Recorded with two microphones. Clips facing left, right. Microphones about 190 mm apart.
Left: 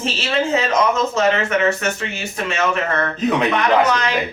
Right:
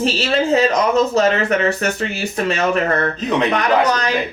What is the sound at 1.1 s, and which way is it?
Speech, 35° right (ahead or behind).